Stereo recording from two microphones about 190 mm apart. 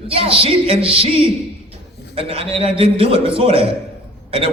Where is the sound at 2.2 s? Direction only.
30° right (ahead or behind).